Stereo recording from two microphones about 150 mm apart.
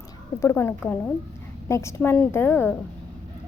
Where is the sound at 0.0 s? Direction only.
20° left (ahead or behind).